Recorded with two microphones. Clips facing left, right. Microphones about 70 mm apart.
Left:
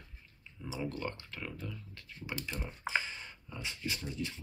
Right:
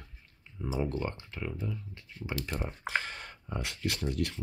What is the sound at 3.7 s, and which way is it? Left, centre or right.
Speech, right.